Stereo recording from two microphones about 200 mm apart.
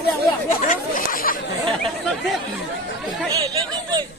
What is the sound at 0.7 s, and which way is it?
Chatter, 45° left (ahead or behind).